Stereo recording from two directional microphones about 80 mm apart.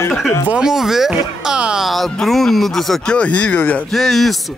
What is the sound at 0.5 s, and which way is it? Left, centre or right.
Speech, centre.